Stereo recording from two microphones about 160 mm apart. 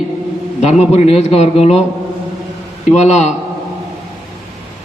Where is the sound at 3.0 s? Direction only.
45° left (ahead or behind).